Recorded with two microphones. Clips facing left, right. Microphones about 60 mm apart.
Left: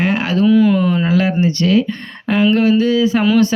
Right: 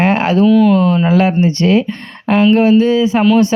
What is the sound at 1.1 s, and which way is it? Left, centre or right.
Speech, right.